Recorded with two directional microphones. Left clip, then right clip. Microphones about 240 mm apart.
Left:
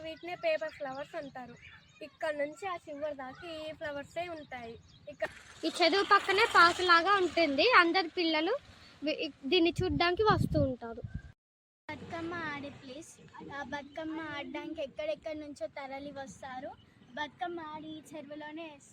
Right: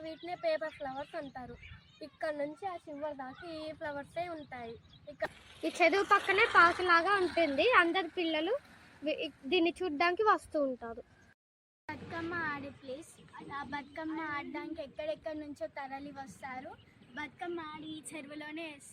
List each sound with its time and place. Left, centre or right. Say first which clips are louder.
0.0 s speech: left 1 dB; centre
3.3 s speech: left 1 dB; left
3.7 s speech: left 1 dB; centre
5.8 s a woman's voice: left 1 dB; centre